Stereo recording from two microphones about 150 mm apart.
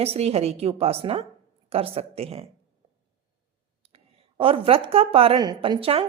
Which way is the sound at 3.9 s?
40° right (ahead or behind).